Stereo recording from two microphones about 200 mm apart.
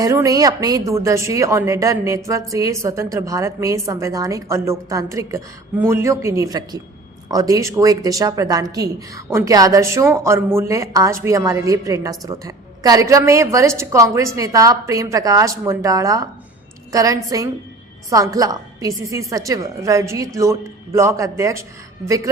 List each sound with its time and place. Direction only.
0.0 s a woman's voice: 15° right (ahead or behind)